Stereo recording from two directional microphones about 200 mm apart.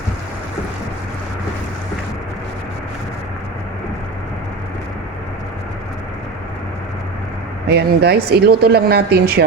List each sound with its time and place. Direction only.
7.7 s speech: 55° right (ahead or behind)